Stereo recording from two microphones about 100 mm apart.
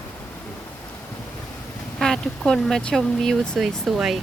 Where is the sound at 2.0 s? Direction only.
5° left (ahead or behind).